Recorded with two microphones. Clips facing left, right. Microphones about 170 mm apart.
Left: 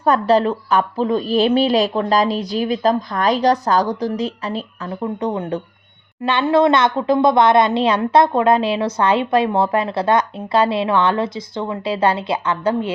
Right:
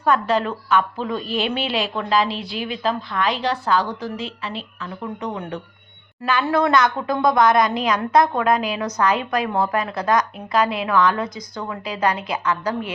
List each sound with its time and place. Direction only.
0.0 s a woman's voice: 35° left (ahead or behind)